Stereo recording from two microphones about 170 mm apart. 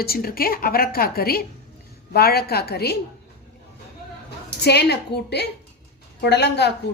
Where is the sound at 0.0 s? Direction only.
65° left (ahead or behind).